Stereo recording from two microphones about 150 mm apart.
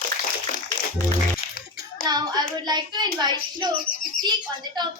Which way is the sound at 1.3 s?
75° left (ahead or behind).